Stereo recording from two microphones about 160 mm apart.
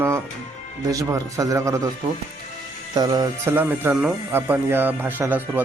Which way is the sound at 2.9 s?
25° right (ahead or behind).